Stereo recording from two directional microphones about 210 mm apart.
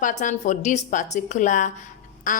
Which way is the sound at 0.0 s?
35° left (ahead or behind).